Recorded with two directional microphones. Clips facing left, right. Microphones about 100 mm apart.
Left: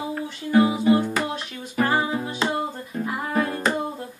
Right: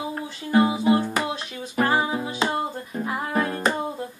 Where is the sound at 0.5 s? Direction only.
20° right (ahead or behind).